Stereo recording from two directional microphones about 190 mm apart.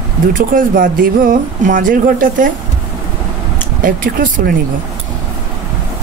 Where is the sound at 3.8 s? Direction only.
45° right (ahead or behind).